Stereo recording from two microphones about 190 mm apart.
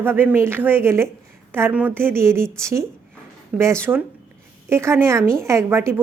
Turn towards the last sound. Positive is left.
turn(degrees=-15)  # may be behind; listen again after turning